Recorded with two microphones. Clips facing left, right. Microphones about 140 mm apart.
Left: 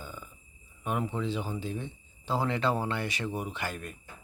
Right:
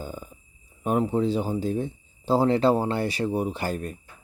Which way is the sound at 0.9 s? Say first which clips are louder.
Right 8 dB; 40° right (ahead or behind).